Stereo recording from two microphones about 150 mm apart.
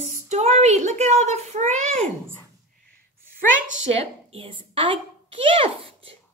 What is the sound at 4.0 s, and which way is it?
A woman's voice, 35° right (ahead or behind).